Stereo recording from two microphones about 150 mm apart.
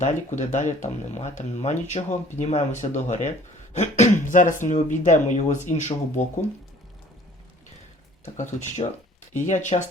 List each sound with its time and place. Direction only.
0.0 s speech: 55° left (ahead or behind)
8.2 s speech: 55° left (ahead or behind)